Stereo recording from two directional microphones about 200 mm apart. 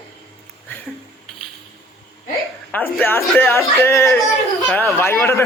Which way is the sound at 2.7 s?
10° left (ahead or behind).